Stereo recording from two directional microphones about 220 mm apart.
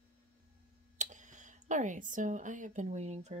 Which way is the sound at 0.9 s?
35° right (ahead or behind).